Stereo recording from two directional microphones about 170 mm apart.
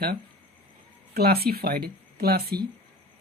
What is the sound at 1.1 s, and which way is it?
Speech, 65° right (ahead or behind).